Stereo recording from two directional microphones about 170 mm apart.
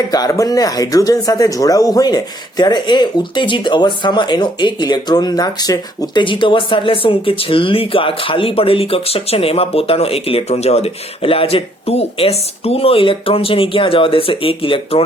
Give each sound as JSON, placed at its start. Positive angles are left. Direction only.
{"t": 0.1, "sound": "speech", "side_deg": 20}